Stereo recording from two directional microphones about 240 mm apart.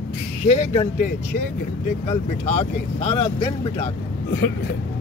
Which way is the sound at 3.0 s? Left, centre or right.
Left.